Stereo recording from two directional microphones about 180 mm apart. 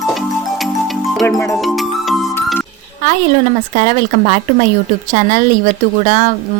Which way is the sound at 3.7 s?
50° right (ahead or behind).